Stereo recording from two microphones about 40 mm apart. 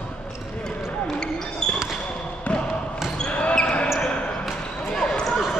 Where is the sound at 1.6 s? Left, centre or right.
Centre.